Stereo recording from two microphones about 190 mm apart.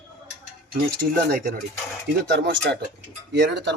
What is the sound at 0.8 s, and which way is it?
Speech, 55° right (ahead or behind).